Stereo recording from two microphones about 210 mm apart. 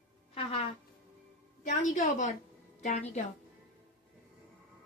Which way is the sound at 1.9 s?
35° left (ahead or behind).